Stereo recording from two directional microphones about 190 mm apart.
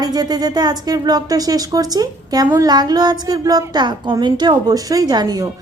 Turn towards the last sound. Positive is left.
turn(degrees=-20)  # may be behind; listen again after turning